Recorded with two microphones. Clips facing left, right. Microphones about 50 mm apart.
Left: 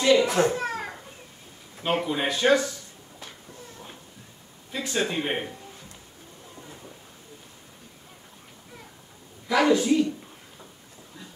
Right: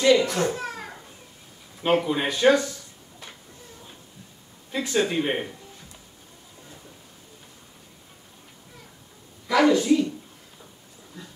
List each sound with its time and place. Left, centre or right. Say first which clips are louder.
0.0 s a sound: even; centre
0.6 s children playing: left 3 dB; left
2.0 s speech: even; centre
4.7 s speech: right 3 dB; centre
9.5 s speech: right 2 dB; centre